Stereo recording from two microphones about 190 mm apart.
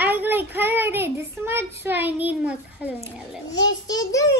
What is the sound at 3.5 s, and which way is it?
Speech, 80° left.